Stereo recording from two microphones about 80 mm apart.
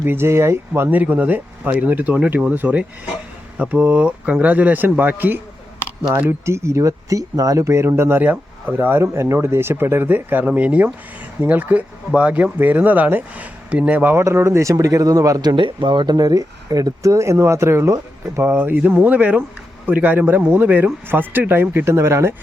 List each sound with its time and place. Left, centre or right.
0.0 s speech: right
0.7 s speech: right
6.4 s speech: right
8.2 s speech: right
14.3 s speech: right
18.4 s speech: right